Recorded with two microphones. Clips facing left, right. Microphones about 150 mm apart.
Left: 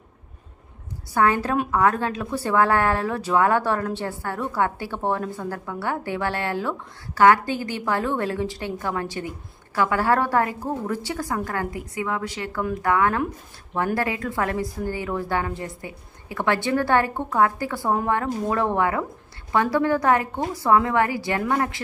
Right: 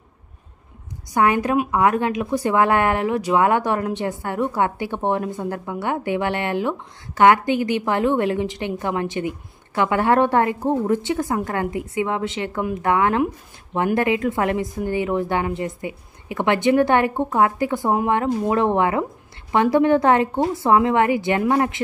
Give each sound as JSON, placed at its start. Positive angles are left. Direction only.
{"t": 1.1, "sound": "a woman's voice", "side_deg": -15}